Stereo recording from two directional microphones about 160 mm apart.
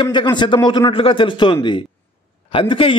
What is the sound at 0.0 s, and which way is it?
A man's voice, 30° left (ahead or behind).